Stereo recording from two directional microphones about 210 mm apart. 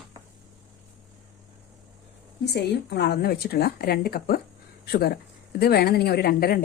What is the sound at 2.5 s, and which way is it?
A woman's voice, 55° left (ahead or behind).